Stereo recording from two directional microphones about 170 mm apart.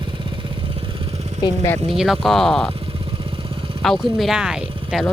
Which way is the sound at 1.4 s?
20° left (ahead or behind).